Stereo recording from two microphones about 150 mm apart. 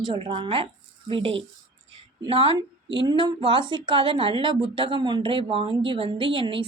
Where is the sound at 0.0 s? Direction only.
35° right (ahead or behind).